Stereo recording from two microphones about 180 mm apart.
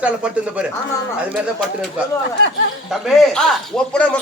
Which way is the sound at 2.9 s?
Centre (ahead or behind).